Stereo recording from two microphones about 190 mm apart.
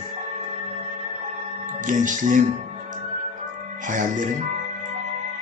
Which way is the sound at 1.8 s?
45° right (ahead or behind).